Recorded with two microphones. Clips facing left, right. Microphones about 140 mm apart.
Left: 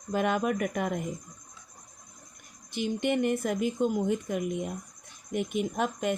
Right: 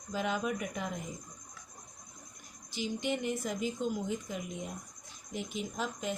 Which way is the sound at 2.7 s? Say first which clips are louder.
Left 6 dB; 55° left (ahead or behind).